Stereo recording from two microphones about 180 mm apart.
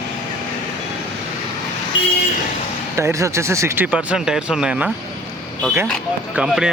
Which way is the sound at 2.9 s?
15° right (ahead or behind).